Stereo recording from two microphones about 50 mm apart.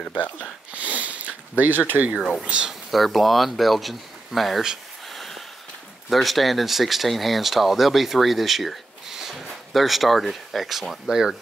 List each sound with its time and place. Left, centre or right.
0.7 s a sound: right
1.6 s speech: right
2.4 s speech: right
2.9 s speech: centre
5.1 s a sound: centre
6.0 s speech: centre